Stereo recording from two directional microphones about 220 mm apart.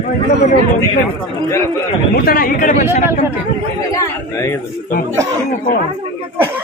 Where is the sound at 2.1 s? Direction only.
40° left (ahead or behind).